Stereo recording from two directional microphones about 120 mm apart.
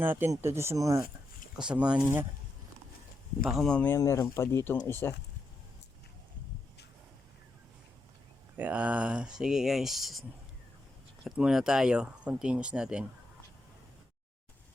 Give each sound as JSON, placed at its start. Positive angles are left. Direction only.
{"t": 0.0, "sound": "speech", "side_deg": -20}
{"t": 1.5, "sound": "speech", "side_deg": -10}
{"t": 3.4, "sound": "speech", "side_deg": 5}
{"t": 3.8, "sound": "speech", "side_deg": 25}
{"t": 8.5, "sound": "speech", "side_deg": -15}